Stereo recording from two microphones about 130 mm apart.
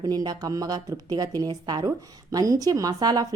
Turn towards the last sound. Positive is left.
turn(degrees=-30)  # may be behind; listen again after turning